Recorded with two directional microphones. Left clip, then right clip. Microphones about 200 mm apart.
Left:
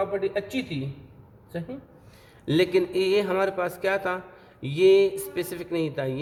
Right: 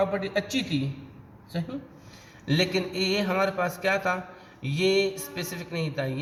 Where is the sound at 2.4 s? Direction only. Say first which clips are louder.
Left 4 dB; 40° left (ahead or behind).